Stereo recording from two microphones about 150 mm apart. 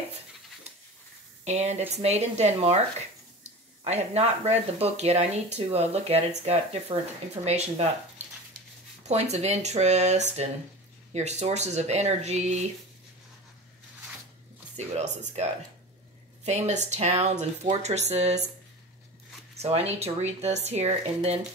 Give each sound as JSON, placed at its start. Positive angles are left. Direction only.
{"t": 1.4, "sound": "speech", "side_deg": -50}
{"t": 9.0, "sound": "speech", "side_deg": -45}
{"t": 16.4, "sound": "speech", "side_deg": -50}
{"t": 19.6, "sound": "speech", "side_deg": -45}